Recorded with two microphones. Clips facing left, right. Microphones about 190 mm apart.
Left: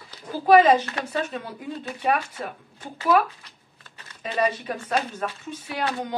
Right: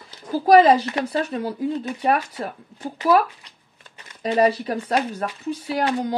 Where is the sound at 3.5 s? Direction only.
15° right (ahead or behind).